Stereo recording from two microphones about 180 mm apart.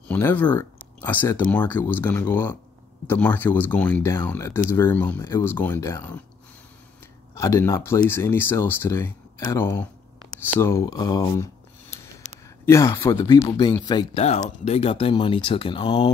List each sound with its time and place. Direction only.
0.1 s speech: 10° left (ahead or behind)
7.3 s speech: 15° left (ahead or behind)
12.2 s a sound: 40° left (ahead or behind)
12.6 s speech: 15° left (ahead or behind)
14.6 s speech: 35° left (ahead or behind)